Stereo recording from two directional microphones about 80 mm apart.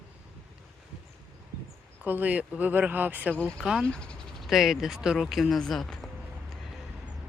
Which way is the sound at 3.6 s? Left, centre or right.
Centre.